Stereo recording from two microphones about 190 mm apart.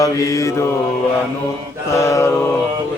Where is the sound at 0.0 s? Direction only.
15° left (ahead or behind).